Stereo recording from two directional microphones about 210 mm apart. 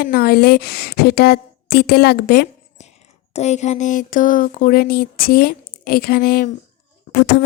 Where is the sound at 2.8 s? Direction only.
30° left (ahead or behind).